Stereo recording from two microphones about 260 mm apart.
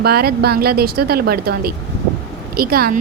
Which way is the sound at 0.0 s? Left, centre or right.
Right.